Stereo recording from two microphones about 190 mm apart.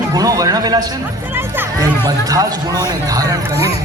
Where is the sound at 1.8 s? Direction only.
20° right (ahead or behind).